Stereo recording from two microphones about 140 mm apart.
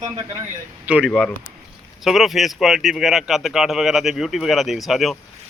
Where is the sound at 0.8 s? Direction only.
10° right (ahead or behind).